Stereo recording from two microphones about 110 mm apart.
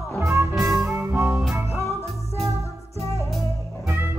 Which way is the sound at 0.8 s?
20° right (ahead or behind).